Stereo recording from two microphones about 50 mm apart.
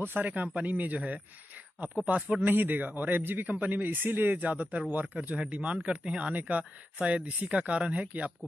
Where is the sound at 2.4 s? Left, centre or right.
Right.